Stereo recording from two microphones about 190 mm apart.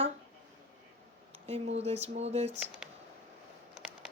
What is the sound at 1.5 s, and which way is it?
Speech, 35° right (ahead or behind).